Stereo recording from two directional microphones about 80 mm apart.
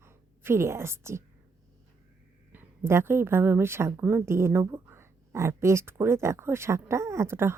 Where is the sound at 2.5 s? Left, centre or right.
Right.